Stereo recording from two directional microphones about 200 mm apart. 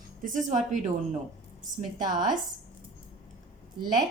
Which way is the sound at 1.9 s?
20° right (ahead or behind).